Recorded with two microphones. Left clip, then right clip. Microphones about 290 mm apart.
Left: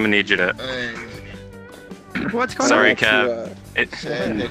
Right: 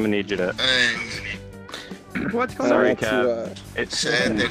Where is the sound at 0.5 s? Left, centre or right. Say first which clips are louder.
Right 6 dB; right.